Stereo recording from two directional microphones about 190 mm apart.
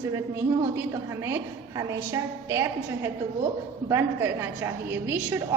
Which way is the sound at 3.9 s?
15° right (ahead or behind).